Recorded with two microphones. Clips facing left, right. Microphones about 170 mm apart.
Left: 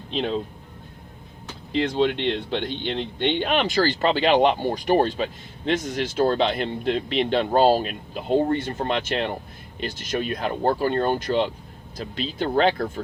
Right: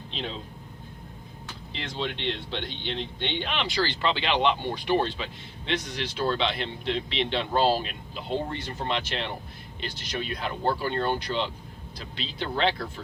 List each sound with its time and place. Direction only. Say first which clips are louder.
1.7 s speech: left 12 dB; 55° left (ahead or behind)